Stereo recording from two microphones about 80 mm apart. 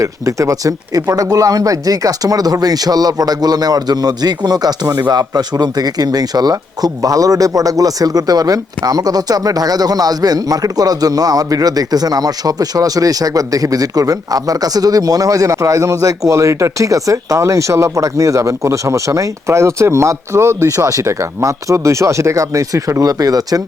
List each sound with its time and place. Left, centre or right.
0.0 s speech: right